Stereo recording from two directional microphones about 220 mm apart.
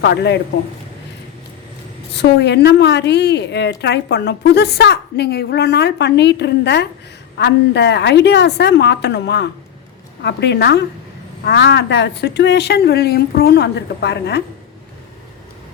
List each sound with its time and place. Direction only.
0.0 s a woman's voice: 50° left (ahead or behind)
2.1 s a woman's voice: 50° left (ahead or behind)